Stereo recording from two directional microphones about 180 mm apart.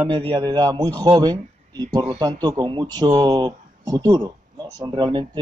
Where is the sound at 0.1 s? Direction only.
25° right (ahead or behind).